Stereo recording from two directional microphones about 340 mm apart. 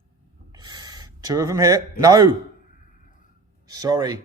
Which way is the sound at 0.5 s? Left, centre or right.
Centre.